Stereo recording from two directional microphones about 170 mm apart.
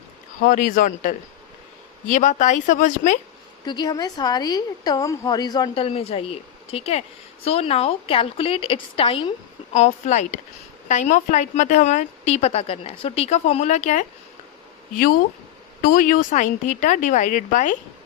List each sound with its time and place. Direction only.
0.4 s a woman's voice: 50° left (ahead or behind)
2.1 s a woman's voice: 45° left (ahead or behind)
3.7 s a woman's voice: 25° left (ahead or behind); by 14.1 s 45° left (ahead or behind)
14.9 s a woman's voice: 55° left (ahead or behind)